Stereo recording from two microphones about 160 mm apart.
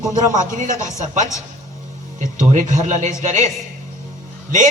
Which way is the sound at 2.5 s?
50° right (ahead or behind).